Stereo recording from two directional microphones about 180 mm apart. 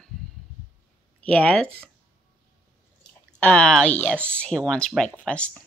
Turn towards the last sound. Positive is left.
turn(degrees=5)  # may be behind; listen again after turning